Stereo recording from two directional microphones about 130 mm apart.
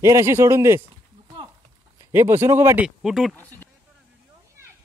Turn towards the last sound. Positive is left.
turn(degrees=-5)  # may be behind; listen again after turning